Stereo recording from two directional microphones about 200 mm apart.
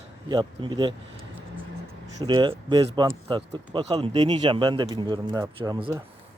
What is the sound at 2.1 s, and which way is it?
A man's voice, 25° right (ahead or behind).